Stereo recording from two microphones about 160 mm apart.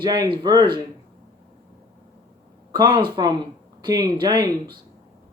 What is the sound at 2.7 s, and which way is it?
Speech, 30° right (ahead or behind).